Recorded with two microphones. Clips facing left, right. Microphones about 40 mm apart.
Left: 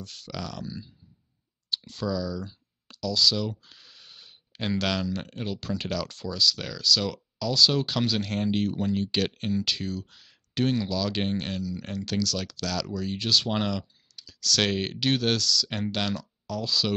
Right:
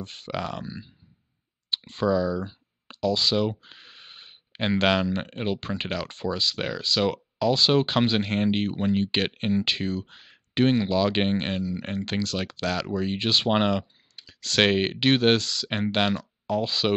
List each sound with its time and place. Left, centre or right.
0.0 s speech: right